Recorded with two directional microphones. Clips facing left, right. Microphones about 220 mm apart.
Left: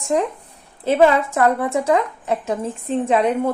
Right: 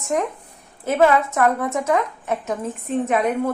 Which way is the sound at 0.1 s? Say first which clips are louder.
Left 3 dB; 30° left (ahead or behind).